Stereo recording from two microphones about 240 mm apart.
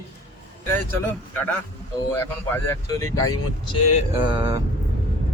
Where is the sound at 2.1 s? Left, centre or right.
Centre.